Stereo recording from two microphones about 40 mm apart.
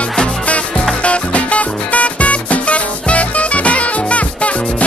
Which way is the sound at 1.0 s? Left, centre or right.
Left.